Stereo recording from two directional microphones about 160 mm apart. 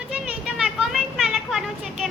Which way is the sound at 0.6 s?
Centre (ahead or behind).